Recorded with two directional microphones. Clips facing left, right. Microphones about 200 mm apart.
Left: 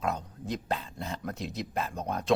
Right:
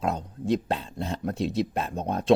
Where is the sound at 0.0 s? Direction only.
30° right (ahead or behind).